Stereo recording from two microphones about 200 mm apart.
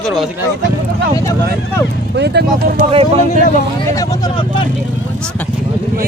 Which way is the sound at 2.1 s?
55° right (ahead or behind).